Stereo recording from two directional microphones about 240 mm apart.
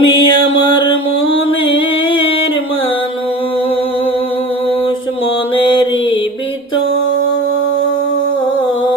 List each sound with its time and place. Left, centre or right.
0.0 s music: centre
1.3 s music: left
5.5 s mantra: left